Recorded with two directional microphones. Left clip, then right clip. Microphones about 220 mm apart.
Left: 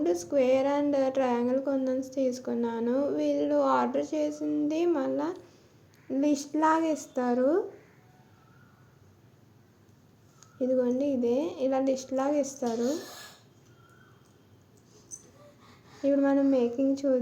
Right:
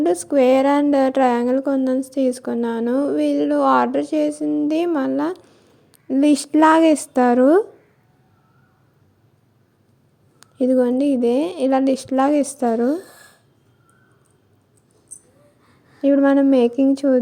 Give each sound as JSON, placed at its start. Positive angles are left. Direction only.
{"t": 0.0, "sound": "a woman's voice", "side_deg": -40}
{"t": 10.4, "sound": "a woman's voice", "side_deg": -40}
{"t": 16.0, "sound": "a woman's voice", "side_deg": -40}